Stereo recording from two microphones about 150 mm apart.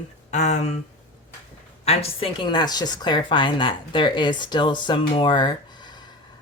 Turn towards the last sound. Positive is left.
turn(degrees=30)  # may be behind; listen again after turning